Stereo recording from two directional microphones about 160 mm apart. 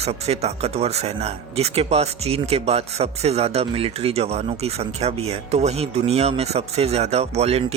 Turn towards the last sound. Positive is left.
turn(degrees=-40)  # may be behind; listen again after turning